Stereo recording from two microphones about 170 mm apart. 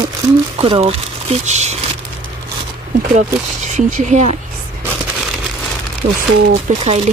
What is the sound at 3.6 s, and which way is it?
Speech, 45° right (ahead or behind).